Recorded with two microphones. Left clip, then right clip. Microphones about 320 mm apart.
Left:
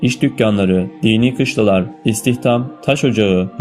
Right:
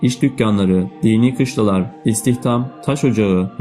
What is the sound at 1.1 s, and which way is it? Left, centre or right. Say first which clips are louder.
Speech: left 1 dB; left.